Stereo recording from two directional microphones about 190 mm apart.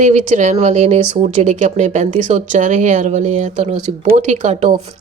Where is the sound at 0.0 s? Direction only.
40° right (ahead or behind).